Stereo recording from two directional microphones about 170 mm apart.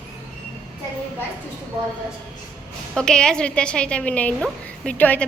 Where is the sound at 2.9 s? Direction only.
5° left (ahead or behind).